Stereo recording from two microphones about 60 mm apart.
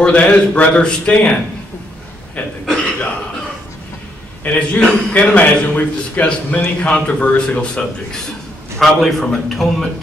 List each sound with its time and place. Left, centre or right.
0.0 s a man's voice: left
4.5 s a man's voice: centre
8.7 s a man's voice: centre